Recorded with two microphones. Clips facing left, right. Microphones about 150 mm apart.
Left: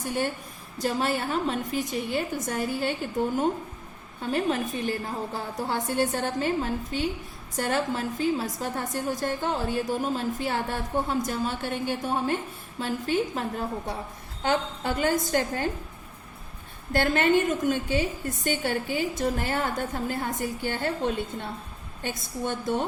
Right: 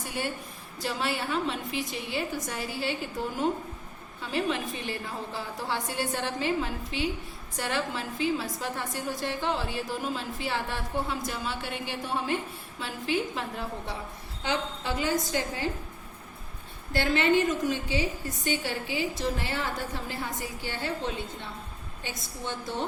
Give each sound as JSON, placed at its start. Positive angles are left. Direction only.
{"t": 0.0, "sound": "a woman's voice", "side_deg": 45}
{"t": 4.2, "sound": "a woman's voice", "side_deg": 45}
{"t": 16.9, "sound": "a woman's voice", "side_deg": 50}